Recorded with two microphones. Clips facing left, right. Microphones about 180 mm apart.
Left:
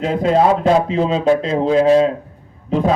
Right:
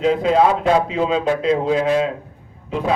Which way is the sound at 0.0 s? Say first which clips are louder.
Even; 45° left (ahead or behind).